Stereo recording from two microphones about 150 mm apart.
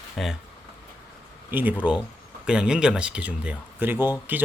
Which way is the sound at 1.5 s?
10° right (ahead or behind).